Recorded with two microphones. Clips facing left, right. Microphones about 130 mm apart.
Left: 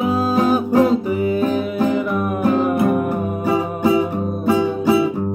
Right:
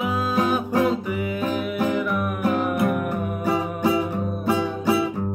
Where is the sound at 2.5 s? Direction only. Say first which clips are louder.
Left 5 dB; 25° left (ahead or behind).